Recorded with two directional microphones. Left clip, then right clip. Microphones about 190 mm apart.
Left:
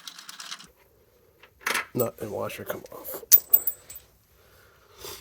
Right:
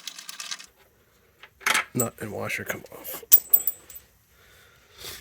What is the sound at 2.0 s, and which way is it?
Speech, 80° right.